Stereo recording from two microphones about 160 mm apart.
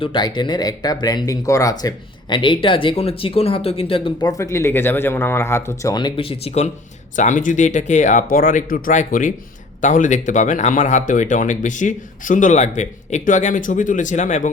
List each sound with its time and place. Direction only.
0.0 s speech: 30° left (ahead or behind)
4.5 s speech: 15° left (ahead or behind); by 6.7 s 40° left (ahead or behind)
7.2 s speech: 50° left (ahead or behind)